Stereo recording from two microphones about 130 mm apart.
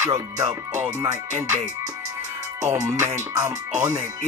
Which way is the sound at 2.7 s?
20° right (ahead or behind).